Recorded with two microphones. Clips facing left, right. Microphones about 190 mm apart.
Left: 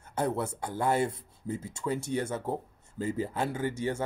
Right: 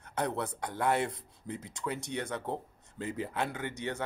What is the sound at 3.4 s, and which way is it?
Speech, 30° left (ahead or behind).